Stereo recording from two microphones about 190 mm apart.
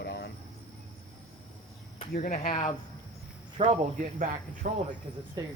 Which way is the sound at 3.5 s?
35° right (ahead or behind).